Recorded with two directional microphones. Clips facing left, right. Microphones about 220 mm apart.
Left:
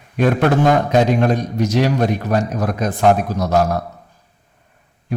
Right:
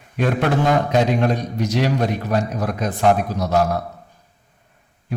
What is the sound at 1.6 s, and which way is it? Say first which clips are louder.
A man's voice: left 3 dB; 45° left (ahead or behind).